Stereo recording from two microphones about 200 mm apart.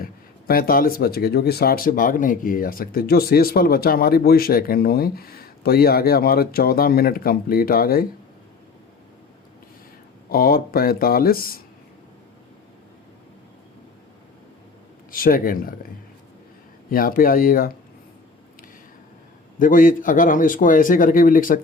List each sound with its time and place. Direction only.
0.0 s speech: 45° left (ahead or behind)
10.2 s speech: 50° left (ahead or behind)
15.1 s speech: 45° left (ahead or behind)
16.9 s speech: 45° left (ahead or behind)
19.5 s speech: 40° left (ahead or behind)